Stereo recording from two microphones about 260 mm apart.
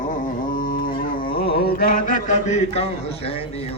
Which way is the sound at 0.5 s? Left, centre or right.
Left.